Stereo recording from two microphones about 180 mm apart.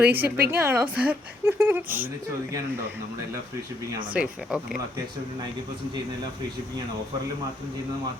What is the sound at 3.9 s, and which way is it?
Speech, 25° right (ahead or behind).